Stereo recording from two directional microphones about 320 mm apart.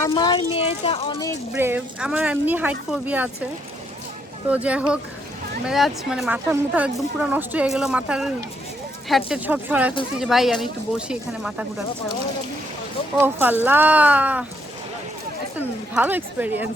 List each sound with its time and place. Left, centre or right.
0.0 s speech: centre
1.5 s speech: centre
4.4 s speech: centre
13.1 s speech: centre
15.5 s speech: centre